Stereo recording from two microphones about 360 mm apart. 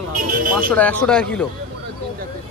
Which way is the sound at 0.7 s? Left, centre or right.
Centre.